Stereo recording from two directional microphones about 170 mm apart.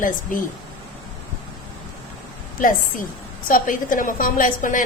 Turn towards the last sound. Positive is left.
turn(degrees=50)  # may be behind; listen again after turning